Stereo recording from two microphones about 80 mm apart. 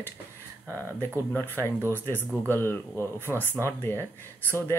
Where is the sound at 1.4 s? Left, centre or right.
Left.